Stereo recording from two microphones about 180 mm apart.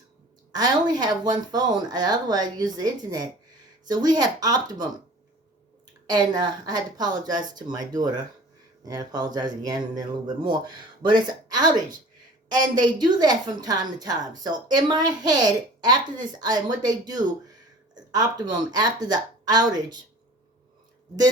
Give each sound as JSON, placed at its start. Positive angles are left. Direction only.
{"t": 0.5, "sound": "speech", "side_deg": -20}
{"t": 6.1, "sound": "a woman's voice", "side_deg": -25}